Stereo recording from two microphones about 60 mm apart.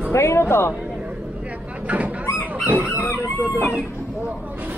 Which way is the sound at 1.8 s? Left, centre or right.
Right.